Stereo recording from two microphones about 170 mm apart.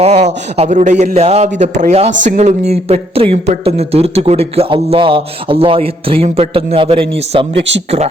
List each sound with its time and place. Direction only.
0.0 s a man's voice: 40° right (ahead or behind)